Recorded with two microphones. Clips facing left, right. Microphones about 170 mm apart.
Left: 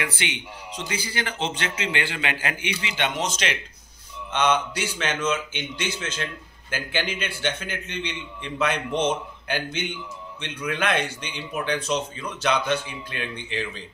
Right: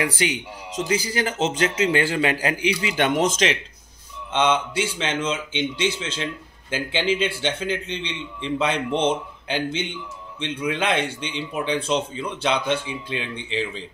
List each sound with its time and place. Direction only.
0.0 s a man's voice: 40° right (ahead or behind)
4.3 s a man's voice: 25° right (ahead or behind)